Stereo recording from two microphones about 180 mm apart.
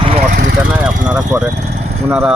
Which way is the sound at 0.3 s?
55° right (ahead or behind).